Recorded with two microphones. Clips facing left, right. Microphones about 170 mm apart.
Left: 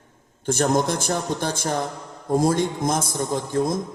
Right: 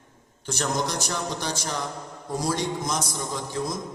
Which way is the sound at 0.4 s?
50° left (ahead or behind).